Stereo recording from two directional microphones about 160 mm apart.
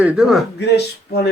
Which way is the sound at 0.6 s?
90° left.